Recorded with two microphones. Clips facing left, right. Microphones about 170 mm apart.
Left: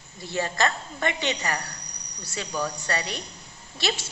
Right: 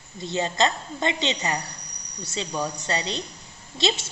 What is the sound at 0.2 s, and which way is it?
A woman's voice, 20° right (ahead or behind).